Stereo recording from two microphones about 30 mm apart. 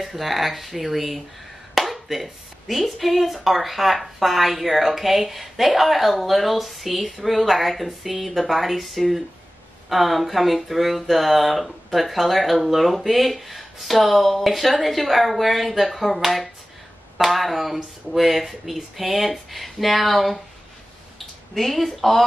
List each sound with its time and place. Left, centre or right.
0.0 s speech: centre
21.5 s speech: centre